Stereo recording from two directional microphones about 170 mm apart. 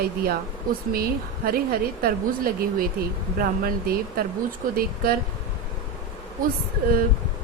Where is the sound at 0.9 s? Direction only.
60° right (ahead or behind).